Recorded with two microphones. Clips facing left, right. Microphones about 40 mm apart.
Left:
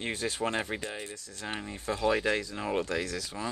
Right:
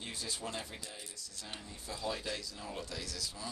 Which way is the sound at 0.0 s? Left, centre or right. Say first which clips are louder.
Left 10 dB; left.